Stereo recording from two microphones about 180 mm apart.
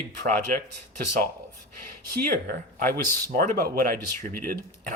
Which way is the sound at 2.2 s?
60° right (ahead or behind).